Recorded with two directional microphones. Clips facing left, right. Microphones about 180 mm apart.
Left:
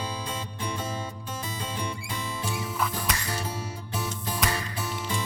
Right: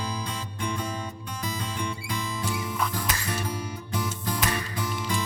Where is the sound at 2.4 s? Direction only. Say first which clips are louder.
Even; 25° left (ahead or behind).